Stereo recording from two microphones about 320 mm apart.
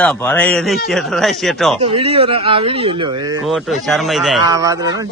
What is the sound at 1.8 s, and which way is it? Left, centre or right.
Speech, centre.